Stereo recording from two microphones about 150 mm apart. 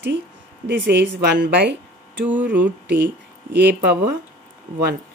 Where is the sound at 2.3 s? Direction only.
10° right (ahead or behind).